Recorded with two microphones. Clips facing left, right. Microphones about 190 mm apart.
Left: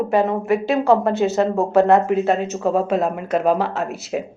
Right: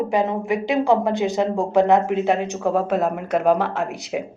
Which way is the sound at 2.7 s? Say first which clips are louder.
Left 1 dB; 10° left (ahead or behind).